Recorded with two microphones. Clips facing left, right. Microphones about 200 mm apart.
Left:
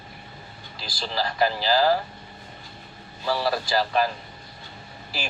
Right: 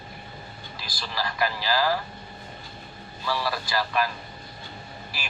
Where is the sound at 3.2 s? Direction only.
35° left (ahead or behind).